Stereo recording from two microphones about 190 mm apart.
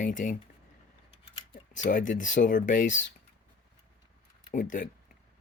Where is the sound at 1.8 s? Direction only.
45° left (ahead or behind).